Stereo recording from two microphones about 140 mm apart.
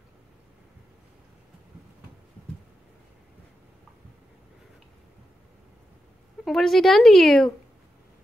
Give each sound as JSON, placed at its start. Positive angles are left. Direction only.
{"t": 6.4, "sound": "speech", "side_deg": 0}